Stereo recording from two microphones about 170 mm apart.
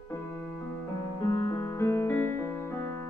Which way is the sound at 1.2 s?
15° left (ahead or behind).